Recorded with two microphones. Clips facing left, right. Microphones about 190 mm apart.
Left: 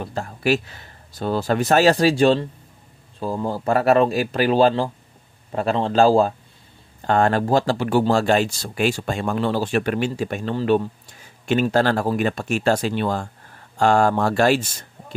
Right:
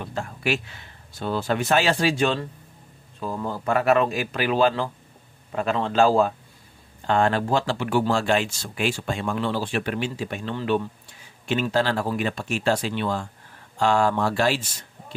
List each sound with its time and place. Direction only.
0.0 s speech: 40° left (ahead or behind)
7.1 s speech: 45° left (ahead or behind)